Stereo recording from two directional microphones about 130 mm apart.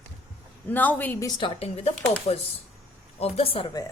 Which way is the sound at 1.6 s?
50° left (ahead or behind).